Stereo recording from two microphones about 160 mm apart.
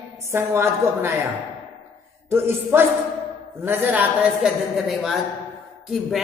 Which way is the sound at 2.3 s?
15° right (ahead or behind).